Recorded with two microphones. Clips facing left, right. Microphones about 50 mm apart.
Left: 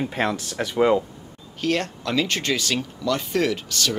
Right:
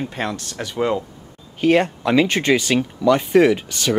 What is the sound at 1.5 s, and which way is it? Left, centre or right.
Speech, centre.